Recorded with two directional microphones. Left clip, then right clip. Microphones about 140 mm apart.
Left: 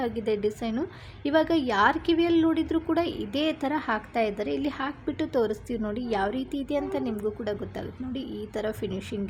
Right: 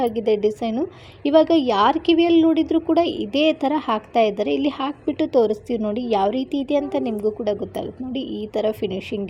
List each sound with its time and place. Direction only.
0.0 s a woman's voice: 15° right (ahead or behind)